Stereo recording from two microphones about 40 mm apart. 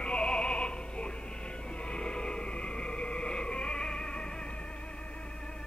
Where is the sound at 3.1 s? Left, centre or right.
Left.